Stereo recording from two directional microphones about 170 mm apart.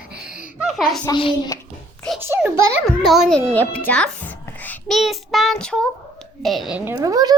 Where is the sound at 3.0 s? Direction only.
Centre (ahead or behind).